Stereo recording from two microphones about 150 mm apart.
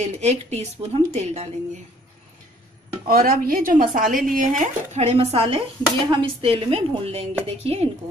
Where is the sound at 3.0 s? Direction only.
70° right (ahead or behind); by 7.8 s 45° right (ahead or behind).